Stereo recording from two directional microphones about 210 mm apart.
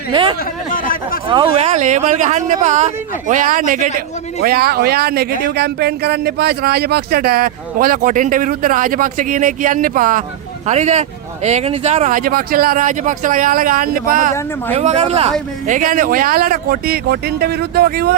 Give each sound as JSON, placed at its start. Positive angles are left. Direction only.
{"t": 0.1, "sound": "speech", "side_deg": -25}
{"t": 0.7, "sound": "chatter", "side_deg": 40}
{"t": 1.3, "sound": "speech", "side_deg": -25}